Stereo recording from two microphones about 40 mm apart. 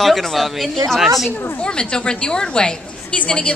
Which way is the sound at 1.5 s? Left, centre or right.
Left.